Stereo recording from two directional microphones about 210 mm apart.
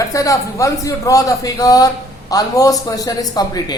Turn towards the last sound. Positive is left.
turn(degrees=20)  # may be behind; listen again after turning